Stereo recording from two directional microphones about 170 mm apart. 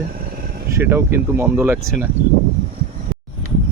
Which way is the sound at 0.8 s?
15° right (ahead or behind).